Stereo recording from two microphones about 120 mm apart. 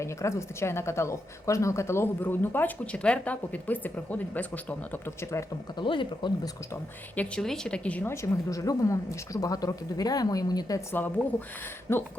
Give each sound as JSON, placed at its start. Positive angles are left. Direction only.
{"t": 0.0, "sound": "a woman's voice", "side_deg": 25}
{"t": 5.7, "sound": "speech", "side_deg": 45}
{"t": 7.2, "sound": "a woman's voice", "side_deg": 10}
{"t": 8.1, "sound": "a woman's voice", "side_deg": 25}
{"t": 10.9, "sound": "a woman's voice", "side_deg": 15}